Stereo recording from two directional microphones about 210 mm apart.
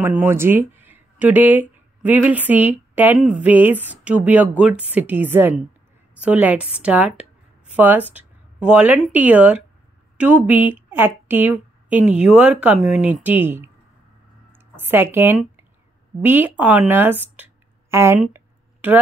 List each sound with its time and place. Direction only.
0.0 s speech: 10° right (ahead or behind)